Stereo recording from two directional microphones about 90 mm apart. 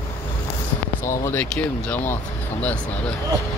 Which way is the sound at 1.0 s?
30° left (ahead or behind).